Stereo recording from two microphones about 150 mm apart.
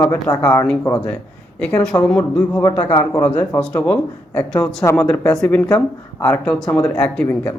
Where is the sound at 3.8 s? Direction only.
10° left (ahead or behind).